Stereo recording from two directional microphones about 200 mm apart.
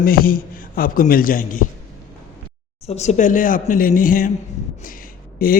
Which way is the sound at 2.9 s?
35° left (ahead or behind).